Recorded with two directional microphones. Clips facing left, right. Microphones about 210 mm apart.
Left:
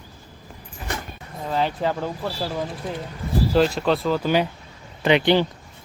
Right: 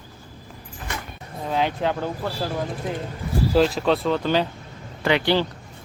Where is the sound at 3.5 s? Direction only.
Centre (ahead or behind); by 5.5 s 20° left (ahead or behind).